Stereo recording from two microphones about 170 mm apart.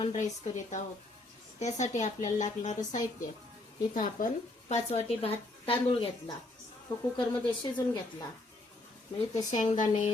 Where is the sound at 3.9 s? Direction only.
55° left (ahead or behind).